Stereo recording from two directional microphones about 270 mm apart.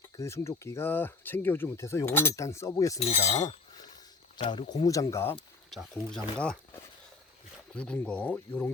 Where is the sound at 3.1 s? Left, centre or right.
Left.